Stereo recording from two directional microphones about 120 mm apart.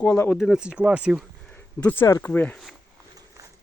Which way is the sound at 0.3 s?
5° right (ahead or behind).